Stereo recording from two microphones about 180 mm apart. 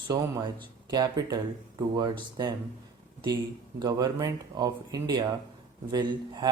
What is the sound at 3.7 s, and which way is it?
Speech, 20° right (ahead or behind).